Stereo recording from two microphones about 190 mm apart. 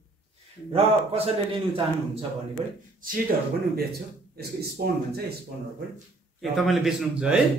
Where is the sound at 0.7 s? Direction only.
30° right (ahead or behind).